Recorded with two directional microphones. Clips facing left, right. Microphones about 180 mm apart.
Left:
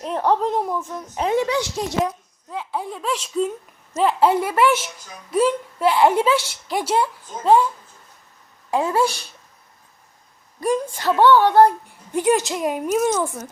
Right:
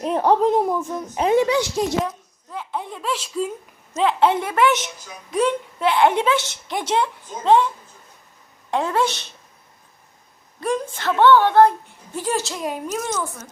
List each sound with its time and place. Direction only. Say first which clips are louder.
0.0 s speech: right 3 dB; 10° right (ahead or behind)
2.0 s a woman's voice: left 2 dB; 10° left (ahead or behind)
8.7 s a woman's voice: left 1 dB; 5° left (ahead or behind)
10.6 s a woman's voice: left 2 dB; 10° left (ahead or behind)
12.5 s speech: left 4 dB; centre (ahead or behind)
12.8 s a woman's voice: left 7 dB; 15° left (ahead or behind)